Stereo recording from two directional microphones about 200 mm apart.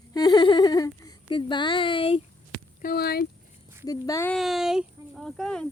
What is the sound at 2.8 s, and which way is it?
Speech, 50° left (ahead or behind).